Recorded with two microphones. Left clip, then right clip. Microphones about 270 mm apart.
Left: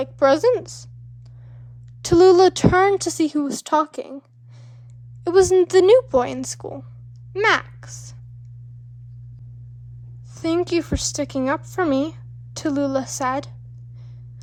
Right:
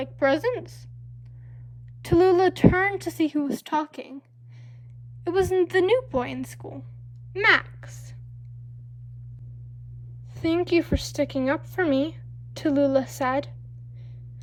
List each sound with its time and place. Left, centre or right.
0.0 s speech: centre
2.0 s a woman's voice: left
5.2 s speech: centre
10.3 s speech: centre